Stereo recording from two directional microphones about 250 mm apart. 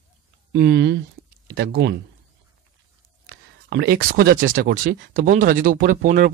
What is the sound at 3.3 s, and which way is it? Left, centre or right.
Speech, right.